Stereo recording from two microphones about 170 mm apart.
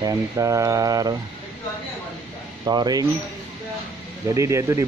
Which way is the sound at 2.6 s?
25° right (ahead or behind).